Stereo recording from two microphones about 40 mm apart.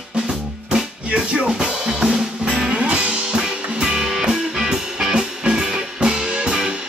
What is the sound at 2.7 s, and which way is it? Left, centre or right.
Music, right.